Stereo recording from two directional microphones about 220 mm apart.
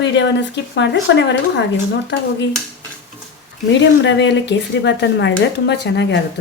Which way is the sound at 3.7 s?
55° left (ahead or behind).